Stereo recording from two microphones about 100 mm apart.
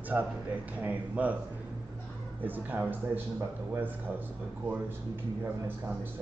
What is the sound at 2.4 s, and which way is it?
Speech, 20° right (ahead or behind).